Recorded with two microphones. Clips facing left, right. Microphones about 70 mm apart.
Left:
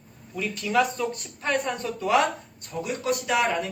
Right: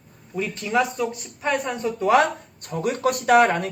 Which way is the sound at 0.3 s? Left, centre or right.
Right.